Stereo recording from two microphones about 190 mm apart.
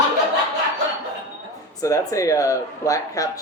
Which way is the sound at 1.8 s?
15° left (ahead or behind).